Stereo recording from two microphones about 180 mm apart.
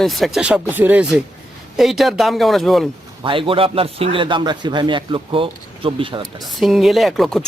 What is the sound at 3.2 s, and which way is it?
A man's voice, 30° right (ahead or behind).